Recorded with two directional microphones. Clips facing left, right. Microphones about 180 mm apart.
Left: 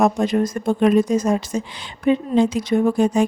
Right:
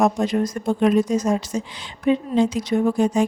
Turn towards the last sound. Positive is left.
turn(degrees=55)  # may be behind; listen again after turning